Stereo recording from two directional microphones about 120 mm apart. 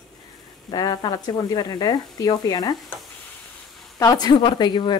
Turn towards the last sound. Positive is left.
turn(degrees=40)  # may be behind; listen again after turning